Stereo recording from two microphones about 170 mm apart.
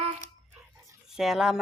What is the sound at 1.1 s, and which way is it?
Speech, centre (ahead or behind).